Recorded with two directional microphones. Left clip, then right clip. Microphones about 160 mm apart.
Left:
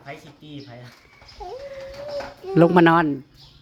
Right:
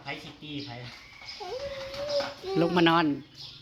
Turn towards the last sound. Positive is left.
turn(degrees=60)  # may be behind; listen again after turning